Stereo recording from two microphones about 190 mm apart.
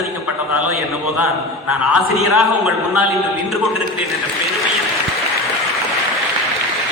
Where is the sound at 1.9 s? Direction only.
Centre (ahead or behind).